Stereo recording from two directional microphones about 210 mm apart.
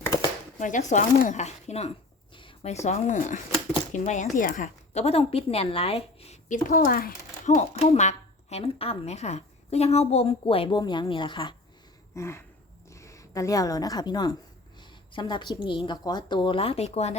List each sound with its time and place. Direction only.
0.6 s a woman's voice: 35° left (ahead or behind)
12.1 s a sound: 15° left (ahead or behind)
12.9 s a woman's voice: 15° left (ahead or behind); by 17.2 s 30° left (ahead or behind)